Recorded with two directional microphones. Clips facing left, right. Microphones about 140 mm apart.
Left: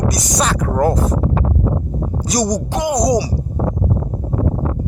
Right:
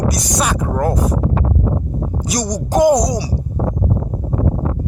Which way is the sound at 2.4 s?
5° left (ahead or behind).